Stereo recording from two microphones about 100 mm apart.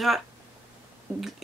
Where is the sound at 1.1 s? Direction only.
25° right (ahead or behind).